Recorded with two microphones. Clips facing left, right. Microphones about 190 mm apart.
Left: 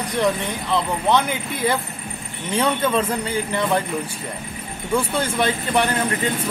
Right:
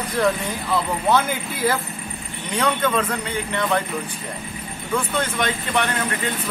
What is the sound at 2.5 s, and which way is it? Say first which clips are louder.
Speech: left 1 dB; 25° left (ahead or behind).